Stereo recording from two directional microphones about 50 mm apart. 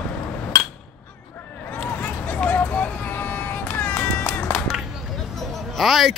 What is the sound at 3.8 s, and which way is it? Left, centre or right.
Music, left.